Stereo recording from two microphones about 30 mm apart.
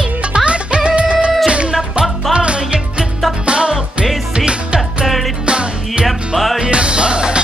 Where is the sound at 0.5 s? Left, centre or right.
Right.